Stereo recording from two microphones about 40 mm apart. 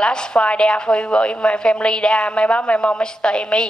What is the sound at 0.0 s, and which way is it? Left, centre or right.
A woman's voice, left.